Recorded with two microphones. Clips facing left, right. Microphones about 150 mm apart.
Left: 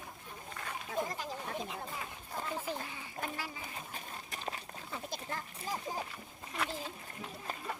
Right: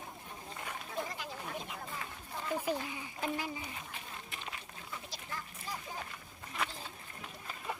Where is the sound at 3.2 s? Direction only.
50° left (ahead or behind).